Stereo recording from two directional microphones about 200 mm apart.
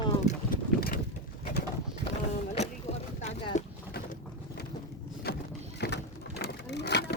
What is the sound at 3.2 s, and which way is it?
Boat, 35° left (ahead or behind).